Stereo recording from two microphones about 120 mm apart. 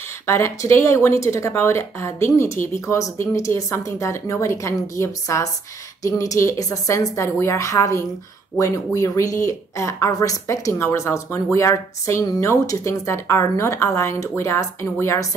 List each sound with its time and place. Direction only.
0.3 s a woman's voice: 20° left (ahead or behind)